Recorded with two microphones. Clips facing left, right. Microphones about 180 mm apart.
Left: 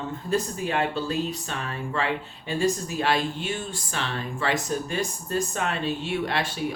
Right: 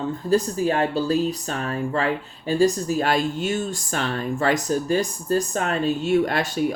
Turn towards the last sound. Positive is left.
turn(degrees=-45)  # may be behind; listen again after turning